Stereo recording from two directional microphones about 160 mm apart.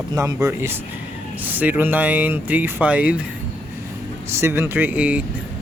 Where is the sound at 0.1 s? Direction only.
20° right (ahead or behind).